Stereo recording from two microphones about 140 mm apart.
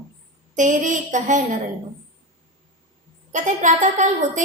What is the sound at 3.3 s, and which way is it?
A woman's voice, 60° right (ahead or behind).